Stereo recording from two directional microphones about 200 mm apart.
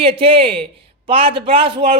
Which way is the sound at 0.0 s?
25° right (ahead or behind).